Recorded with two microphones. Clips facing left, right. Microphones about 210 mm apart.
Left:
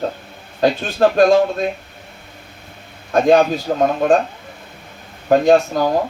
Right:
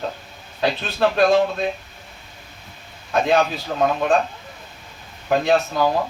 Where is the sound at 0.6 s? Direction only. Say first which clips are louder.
Left 5 dB; 45° left (ahead or behind).